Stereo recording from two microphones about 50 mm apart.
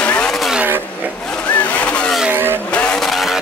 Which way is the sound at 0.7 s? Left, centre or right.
Right.